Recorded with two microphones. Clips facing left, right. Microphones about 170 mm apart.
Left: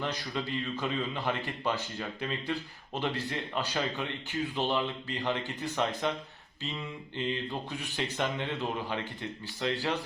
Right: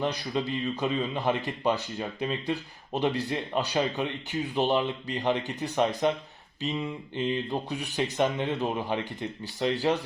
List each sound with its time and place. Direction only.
0.0 s speech: 20° right (ahead or behind)